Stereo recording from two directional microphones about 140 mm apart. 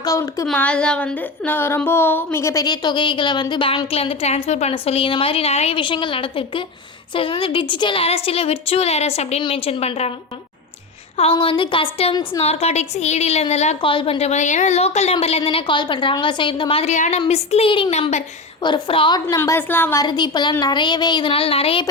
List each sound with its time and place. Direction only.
0.0 s speech: 25° left (ahead or behind)
0.5 s a woman's voice: 10° left (ahead or behind); by 9.4 s 50° left (ahead or behind)
9.4 s a woman's voice: 40° left (ahead or behind)
11.2 s a woman's voice: 40° left (ahead or behind)
16.9 s a woman's voice: 55° left (ahead or behind); by 19.4 s 30° left (ahead or behind)
19.4 s a woman's voice: 15° left (ahead or behind)
20.0 s speech: 30° left (ahead or behind)